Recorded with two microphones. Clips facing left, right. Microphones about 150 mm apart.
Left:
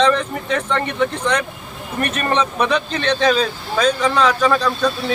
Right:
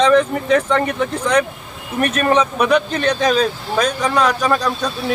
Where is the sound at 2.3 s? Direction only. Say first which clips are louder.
Right 3 dB; 10° right (ahead or behind).